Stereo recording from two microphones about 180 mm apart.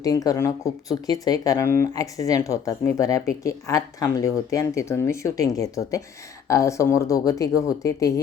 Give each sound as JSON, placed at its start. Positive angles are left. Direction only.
{"t": 0.0, "sound": "speech", "side_deg": 20}